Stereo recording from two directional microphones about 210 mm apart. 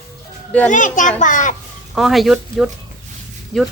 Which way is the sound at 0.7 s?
35° left (ahead or behind).